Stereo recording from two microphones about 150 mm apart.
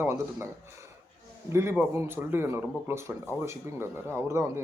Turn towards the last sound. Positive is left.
turn(degrees=-15)  # may be behind; listen again after turning